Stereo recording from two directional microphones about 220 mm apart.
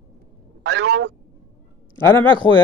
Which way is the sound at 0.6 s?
50° right (ahead or behind).